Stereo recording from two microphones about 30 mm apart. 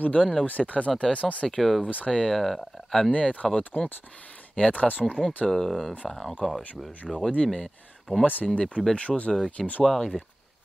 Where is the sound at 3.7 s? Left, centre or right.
Left.